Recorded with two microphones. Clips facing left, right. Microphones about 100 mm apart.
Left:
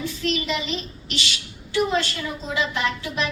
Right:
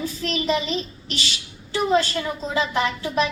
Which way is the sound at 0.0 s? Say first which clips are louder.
Right 1 dB; 35° right (ahead or behind).